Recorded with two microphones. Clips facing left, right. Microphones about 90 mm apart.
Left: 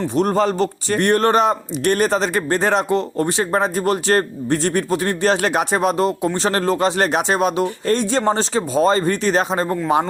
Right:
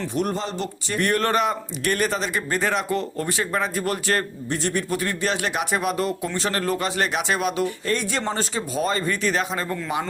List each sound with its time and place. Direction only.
0.1 s a man's voice: 30° left (ahead or behind)
0.3 s a man's voice: 45° left (ahead or behind)